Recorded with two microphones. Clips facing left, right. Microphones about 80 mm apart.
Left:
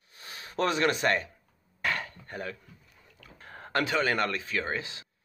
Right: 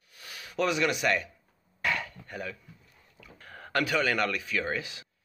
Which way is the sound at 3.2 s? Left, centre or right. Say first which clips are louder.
Left 1 dB; left.